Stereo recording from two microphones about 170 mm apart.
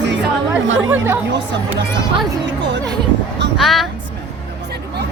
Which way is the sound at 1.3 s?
90° right.